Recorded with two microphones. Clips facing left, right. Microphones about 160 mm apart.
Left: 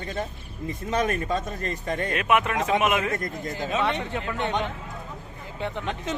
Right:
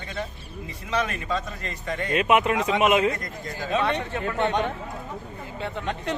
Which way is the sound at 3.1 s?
50° left (ahead or behind).